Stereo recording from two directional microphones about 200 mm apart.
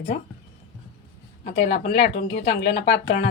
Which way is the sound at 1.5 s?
55° left (ahead or behind).